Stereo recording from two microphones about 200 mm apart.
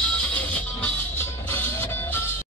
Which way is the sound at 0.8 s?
10° left (ahead or behind).